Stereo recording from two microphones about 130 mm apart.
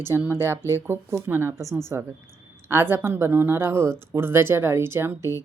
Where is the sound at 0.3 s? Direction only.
20° right (ahead or behind).